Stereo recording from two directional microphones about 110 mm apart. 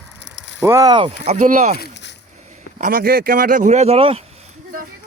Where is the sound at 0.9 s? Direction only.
55° right (ahead or behind).